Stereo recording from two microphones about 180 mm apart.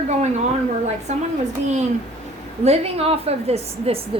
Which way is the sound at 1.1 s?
40° right (ahead or behind).